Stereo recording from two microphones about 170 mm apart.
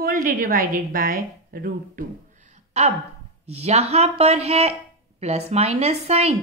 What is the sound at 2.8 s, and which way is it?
Speech, 40° right (ahead or behind).